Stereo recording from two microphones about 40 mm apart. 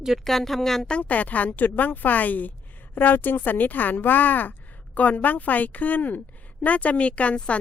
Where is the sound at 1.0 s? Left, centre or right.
Left.